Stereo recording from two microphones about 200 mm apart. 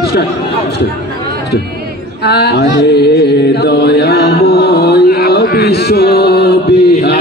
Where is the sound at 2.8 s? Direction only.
55° left (ahead or behind).